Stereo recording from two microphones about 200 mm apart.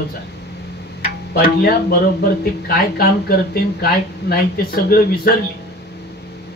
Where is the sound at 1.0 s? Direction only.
50° left (ahead or behind).